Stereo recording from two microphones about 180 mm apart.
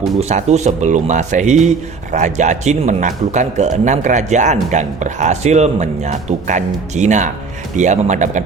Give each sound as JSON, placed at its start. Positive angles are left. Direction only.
{"t": 0.2, "sound": "a man's voice", "side_deg": -40}